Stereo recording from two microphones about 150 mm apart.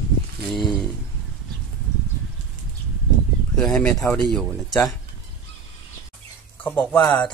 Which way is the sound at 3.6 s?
5° left (ahead or behind).